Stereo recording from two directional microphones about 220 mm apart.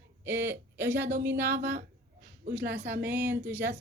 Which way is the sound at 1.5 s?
50° right (ahead or behind).